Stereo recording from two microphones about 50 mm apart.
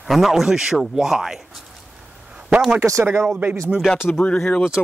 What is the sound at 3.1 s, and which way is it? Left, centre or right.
Speech, right.